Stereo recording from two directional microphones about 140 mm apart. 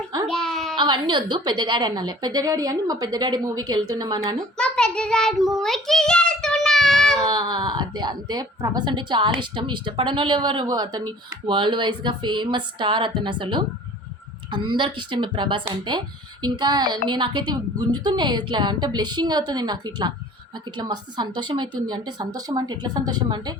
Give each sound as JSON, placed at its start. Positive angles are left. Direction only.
{"t": 0.3, "sound": "a sound", "side_deg": 5}
{"t": 0.8, "sound": "a woman's voice", "side_deg": -35}
{"t": 4.5, "sound": "child singing", "side_deg": 5}
{"t": 7.3, "sound": "a woman's voice", "side_deg": -30}